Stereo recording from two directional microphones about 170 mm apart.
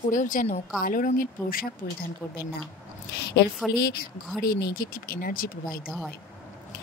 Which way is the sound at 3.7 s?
65° left (ahead or behind).